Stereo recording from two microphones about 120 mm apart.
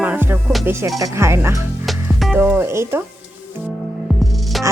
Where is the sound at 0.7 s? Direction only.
25° right (ahead or behind).